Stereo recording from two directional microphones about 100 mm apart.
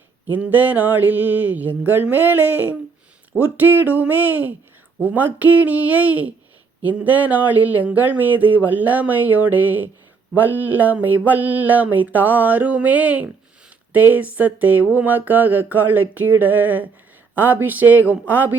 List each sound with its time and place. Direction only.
0.3 s speech: 15° right (ahead or behind)